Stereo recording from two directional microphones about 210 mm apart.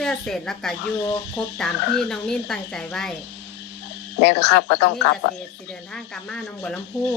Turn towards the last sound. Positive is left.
turn(degrees=5)  # may be behind; listen again after turning